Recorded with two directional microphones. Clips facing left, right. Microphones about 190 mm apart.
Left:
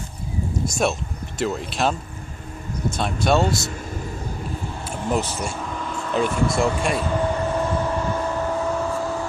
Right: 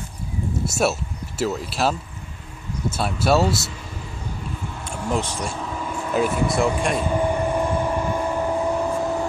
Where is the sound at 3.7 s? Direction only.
45° left (ahead or behind).